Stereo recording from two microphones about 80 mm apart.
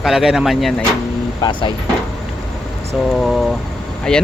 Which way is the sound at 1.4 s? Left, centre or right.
Left.